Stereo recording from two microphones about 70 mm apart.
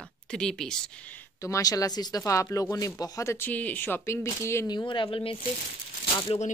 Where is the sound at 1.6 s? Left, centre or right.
Left.